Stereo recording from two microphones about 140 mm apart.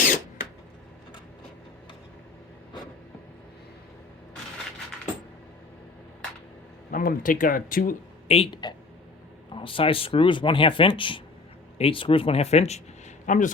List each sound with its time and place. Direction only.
6.9 s speech: 85° left
8.3 s speech: 40° left (ahead or behind)
13.2 s speech: 65° left (ahead or behind)